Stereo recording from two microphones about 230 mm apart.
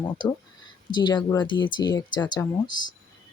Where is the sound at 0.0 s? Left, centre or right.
Centre.